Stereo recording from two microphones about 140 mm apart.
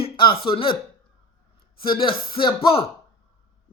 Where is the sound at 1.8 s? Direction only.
35° left (ahead or behind).